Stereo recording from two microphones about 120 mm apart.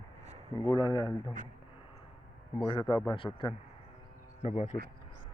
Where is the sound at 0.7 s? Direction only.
35° left (ahead or behind).